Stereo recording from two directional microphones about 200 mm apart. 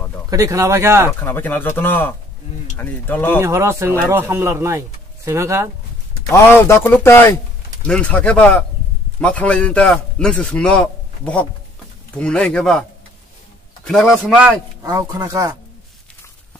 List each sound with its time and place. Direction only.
0.3 s speech: 15° right (ahead or behind)
1.2 s speech: 10° left (ahead or behind)
3.3 s speech: 15° right (ahead or behind)
6.3 s a man's voice: 15° left (ahead or behind)
13.8 s a man's voice: centre (ahead or behind)
14.8 s speech: 15° right (ahead or behind)